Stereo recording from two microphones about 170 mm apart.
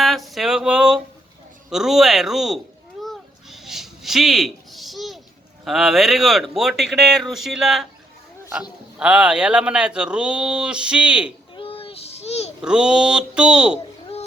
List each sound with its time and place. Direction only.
0.0 s a sound: centre (ahead or behind)
1.7 s speech: centre (ahead or behind)
3.0 s a sound: centre (ahead or behind)
5.6 s speech: centre (ahead or behind)
9.0 s speech: 5° right (ahead or behind)
11.5 s child singing: 30° left (ahead or behind)
12.6 s speech: 5° right (ahead or behind)